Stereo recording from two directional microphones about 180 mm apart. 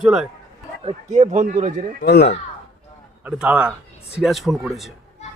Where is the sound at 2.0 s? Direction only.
65° left (ahead or behind).